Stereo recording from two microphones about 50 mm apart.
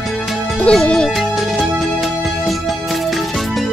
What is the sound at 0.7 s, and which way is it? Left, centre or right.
Speech, left.